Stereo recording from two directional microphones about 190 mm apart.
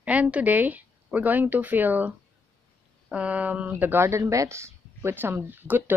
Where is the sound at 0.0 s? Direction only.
5° right (ahead or behind).